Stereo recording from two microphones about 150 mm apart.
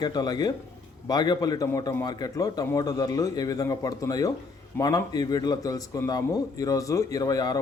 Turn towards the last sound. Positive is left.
turn(degrees=25)  # may be behind; listen again after turning